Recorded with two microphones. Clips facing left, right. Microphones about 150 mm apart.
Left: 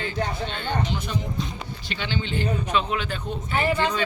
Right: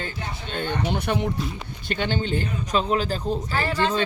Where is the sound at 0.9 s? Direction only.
65° right (ahead or behind).